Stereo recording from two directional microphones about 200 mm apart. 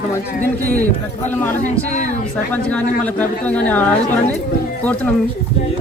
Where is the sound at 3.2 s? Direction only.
5° left (ahead or behind).